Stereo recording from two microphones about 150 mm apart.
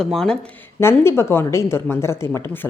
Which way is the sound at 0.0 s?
5° left (ahead or behind).